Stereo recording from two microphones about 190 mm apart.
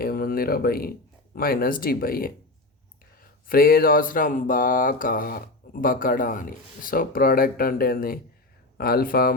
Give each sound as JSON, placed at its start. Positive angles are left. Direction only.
{"t": 0.0, "sound": "speech", "side_deg": 50}